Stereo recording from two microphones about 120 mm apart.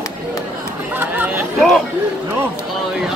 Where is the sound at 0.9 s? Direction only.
15° right (ahead or behind).